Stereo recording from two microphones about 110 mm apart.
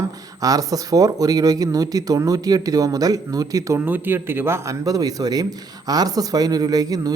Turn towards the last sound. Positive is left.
turn(degrees=-35)  # may be behind; listen again after turning